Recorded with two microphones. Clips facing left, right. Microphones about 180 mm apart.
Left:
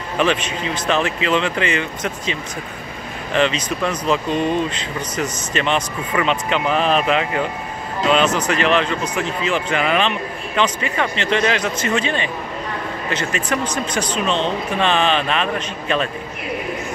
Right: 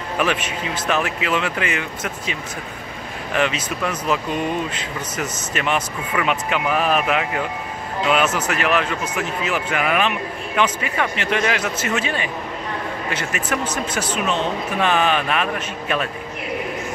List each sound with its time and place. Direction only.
0.2 s a man's voice: 5° right (ahead or behind)
3.3 s a man's voice: 5° right (ahead or behind)